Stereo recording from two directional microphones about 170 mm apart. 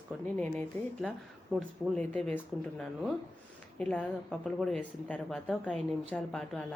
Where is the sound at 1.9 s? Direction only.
5° left (ahead or behind).